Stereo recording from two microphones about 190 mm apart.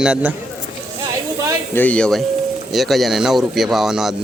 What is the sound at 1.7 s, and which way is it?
Speech, 10° left (ahead or behind).